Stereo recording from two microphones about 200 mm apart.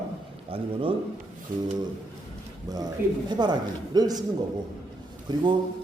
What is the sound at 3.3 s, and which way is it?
Speech, 20° right (ahead or behind).